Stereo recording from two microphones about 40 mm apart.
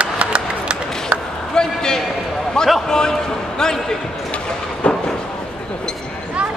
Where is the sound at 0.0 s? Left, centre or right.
Right.